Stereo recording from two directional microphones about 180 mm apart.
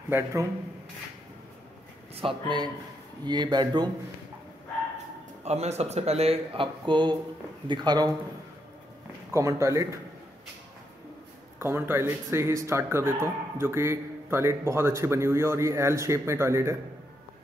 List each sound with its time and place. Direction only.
0.1 s speech: 15° right (ahead or behind)
2.1 s speech: 30° right (ahead or behind)
5.4 s speech: 35° right (ahead or behind)
9.3 s speech: 15° right (ahead or behind)
11.6 s speech: 15° right (ahead or behind)